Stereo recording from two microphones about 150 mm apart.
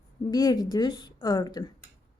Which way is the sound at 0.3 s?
25° left (ahead or behind).